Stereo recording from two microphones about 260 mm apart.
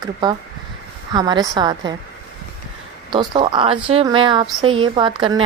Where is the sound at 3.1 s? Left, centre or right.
Centre.